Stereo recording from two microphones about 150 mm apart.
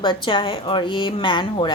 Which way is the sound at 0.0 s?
35° left (ahead or behind).